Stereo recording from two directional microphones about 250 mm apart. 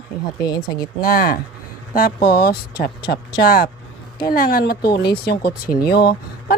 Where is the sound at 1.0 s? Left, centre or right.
Left.